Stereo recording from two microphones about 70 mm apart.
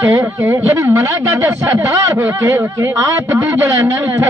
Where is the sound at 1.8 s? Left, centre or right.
Right.